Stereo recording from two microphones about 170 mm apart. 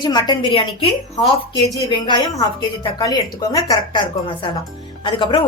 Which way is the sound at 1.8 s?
25° left (ahead or behind).